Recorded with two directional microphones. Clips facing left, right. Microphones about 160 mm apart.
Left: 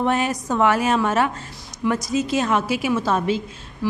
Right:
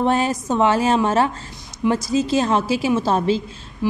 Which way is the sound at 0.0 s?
30° right (ahead or behind).